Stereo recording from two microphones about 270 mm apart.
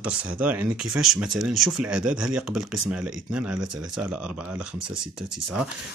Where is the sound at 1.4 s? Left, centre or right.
Right.